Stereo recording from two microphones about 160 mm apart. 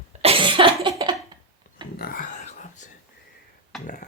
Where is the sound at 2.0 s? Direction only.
65° left (ahead or behind); by 2.9 s 50° left (ahead or behind).